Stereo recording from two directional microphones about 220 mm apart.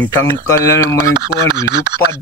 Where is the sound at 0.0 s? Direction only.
10° left (ahead or behind).